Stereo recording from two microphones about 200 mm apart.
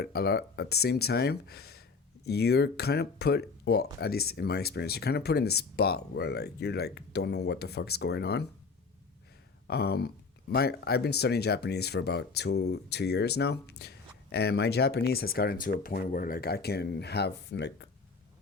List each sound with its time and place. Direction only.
0.0 s speech: 50° left (ahead or behind)
9.6 s speech: 55° left (ahead or behind)